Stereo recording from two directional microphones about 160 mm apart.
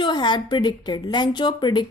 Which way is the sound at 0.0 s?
30° left (ahead or behind).